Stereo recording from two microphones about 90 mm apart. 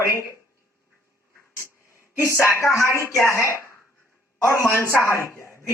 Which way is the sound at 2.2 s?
30° left (ahead or behind).